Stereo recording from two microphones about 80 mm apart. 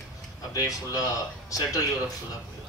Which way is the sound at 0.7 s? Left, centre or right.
Left.